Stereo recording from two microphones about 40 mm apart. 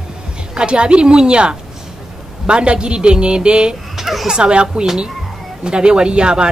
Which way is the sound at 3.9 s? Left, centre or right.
Centre.